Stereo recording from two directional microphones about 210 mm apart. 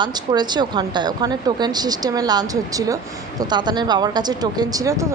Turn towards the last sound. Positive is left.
turn(degrees=-15)  # may be behind; listen again after turning